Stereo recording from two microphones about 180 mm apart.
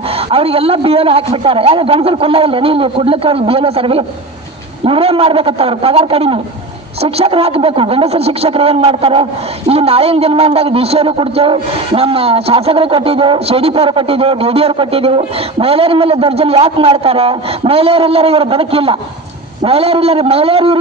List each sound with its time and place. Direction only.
0.3 s a man's voice: 30° right (ahead or behind)